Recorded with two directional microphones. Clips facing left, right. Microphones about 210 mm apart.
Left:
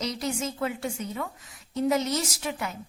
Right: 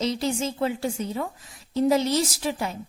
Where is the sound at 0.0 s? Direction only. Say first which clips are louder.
Right 5 dB; 30° right (ahead or behind).